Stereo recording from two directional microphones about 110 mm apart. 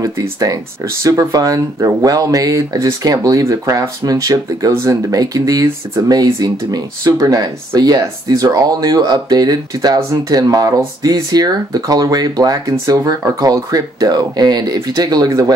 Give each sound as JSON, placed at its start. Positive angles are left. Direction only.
{"t": 0.0, "sound": "speech", "side_deg": -30}